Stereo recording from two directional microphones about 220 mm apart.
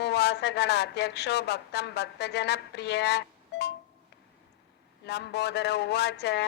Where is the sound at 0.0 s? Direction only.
50° left (ahead or behind).